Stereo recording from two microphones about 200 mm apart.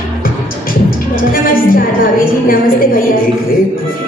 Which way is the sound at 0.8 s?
45° left (ahead or behind).